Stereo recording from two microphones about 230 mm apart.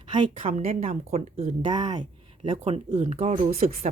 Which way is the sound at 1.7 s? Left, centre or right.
Centre.